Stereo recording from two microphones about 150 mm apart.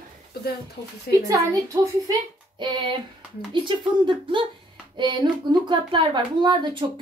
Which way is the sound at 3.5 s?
35° right (ahead or behind).